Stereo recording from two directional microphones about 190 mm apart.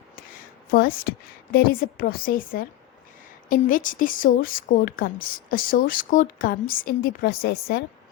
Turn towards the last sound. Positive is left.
turn(degrees=55)  # may be behind; listen again after turning